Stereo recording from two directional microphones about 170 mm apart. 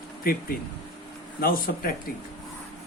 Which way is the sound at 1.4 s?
60° left (ahead or behind).